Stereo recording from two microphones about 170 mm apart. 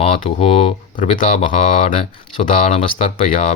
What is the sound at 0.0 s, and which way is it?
Speech, 35° left (ahead or behind).